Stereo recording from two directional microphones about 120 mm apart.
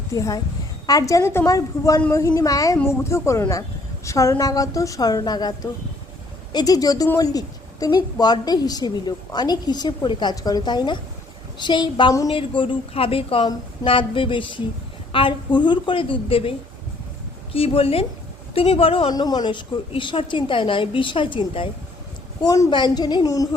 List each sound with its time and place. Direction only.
0.1 s a woman's voice: 30° left (ahead or behind); by 16.5 s 50° left (ahead or behind)
17.5 s a woman's voice: 50° left (ahead or behind)
19.1 s a woman's voice: 35° left (ahead or behind)
22.4 s a woman's voice: 25° left (ahead or behind)
22.7 s a woman's voice: 40° left (ahead or behind)